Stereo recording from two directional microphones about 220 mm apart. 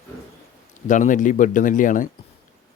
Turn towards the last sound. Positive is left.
turn(degrees=35)  # may be behind; listen again after turning